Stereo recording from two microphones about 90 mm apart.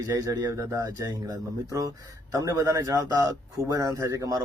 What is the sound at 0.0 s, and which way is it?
A man's voice, 40° right (ahead or behind).